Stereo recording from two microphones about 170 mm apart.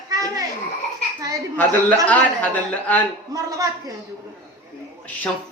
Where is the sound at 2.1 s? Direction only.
10° left (ahead or behind).